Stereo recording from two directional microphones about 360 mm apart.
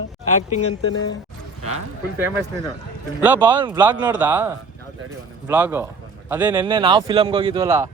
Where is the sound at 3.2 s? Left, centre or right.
Centre.